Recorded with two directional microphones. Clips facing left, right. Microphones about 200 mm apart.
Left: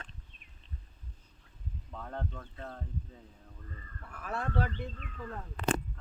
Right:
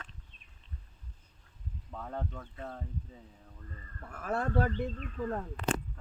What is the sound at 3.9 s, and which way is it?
Speech, 45° right (ahead or behind).